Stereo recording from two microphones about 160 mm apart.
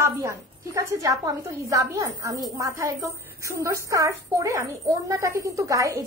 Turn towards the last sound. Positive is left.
turn(degrees=-20)  # may be behind; listen again after turning